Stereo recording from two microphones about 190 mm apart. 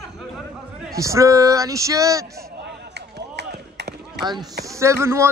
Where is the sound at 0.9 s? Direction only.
15° right (ahead or behind).